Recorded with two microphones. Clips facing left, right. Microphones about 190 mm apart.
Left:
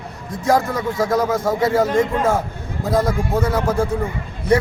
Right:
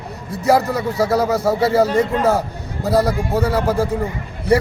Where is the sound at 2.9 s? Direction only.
35° right (ahead or behind).